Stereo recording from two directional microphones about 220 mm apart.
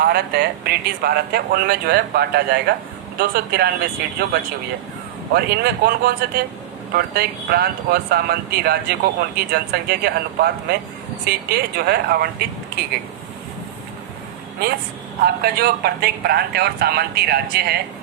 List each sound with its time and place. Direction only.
0.0 s speech: 45° right (ahead or behind)
15.2 s speech: 45° right (ahead or behind)